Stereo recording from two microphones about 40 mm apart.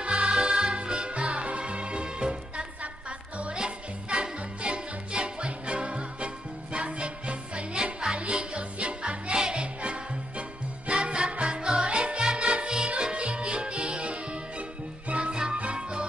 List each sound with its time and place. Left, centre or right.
0.0 s music: right
3.5 s music: right